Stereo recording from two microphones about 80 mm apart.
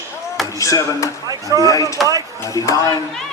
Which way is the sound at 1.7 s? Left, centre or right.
Left.